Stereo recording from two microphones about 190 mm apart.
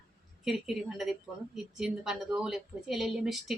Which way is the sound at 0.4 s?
Centre (ahead or behind).